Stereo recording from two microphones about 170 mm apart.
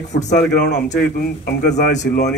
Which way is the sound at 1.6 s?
45° left (ahead or behind).